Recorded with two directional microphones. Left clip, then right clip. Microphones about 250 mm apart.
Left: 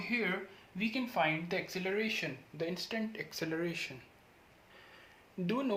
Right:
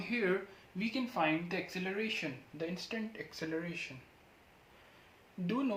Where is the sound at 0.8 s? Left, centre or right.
Left.